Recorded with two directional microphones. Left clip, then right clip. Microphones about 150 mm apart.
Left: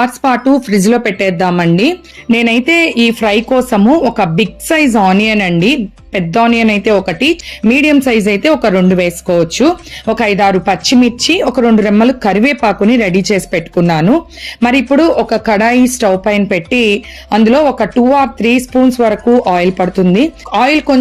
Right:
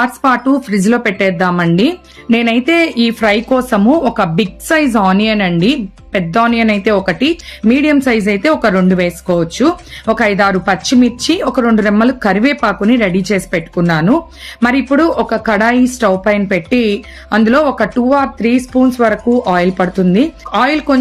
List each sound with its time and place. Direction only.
0.0 s speech: 20° left (ahead or behind)
11.8 s speech: 25° left (ahead or behind)